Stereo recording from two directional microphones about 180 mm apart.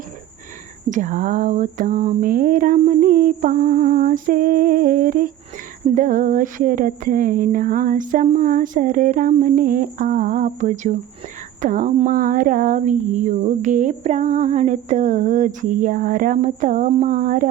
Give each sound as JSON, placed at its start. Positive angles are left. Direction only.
{"t": 0.9, "sound": "speech", "side_deg": -45}